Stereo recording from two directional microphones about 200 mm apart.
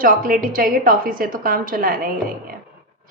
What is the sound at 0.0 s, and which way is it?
Speech, 45° right (ahead or behind).